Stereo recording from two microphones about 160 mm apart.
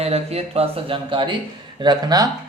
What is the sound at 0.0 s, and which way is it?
Speech, 40° right (ahead or behind).